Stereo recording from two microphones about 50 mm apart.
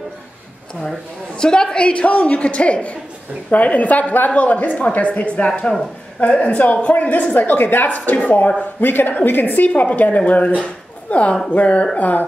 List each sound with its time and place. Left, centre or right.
1.4 s a woman's voice: centre; by 10.5 s left
10.6 s a sound: left
11.5 s a woman's voice: left
12.0 s a woman's voice: left